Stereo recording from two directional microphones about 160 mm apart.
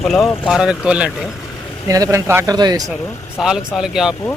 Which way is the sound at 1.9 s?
20° right (ahead or behind).